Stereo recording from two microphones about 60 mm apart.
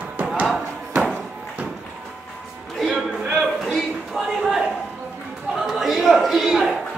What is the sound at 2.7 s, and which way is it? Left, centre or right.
Music, centre.